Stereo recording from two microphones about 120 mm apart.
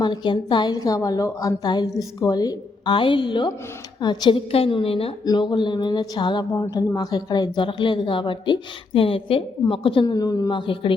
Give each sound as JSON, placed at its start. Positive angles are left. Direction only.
{"t": 0.0, "sound": "a woman's voice", "side_deg": 40}
{"t": 5.2, "sound": "a woman's voice", "side_deg": 35}
{"t": 10.1, "sound": "a woman's voice", "side_deg": 30}